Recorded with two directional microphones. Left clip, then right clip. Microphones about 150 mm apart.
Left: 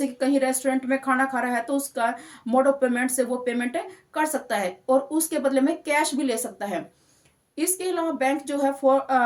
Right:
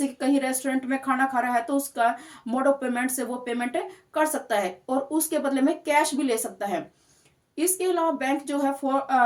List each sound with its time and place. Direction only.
0.2 s speech: 25° left (ahead or behind)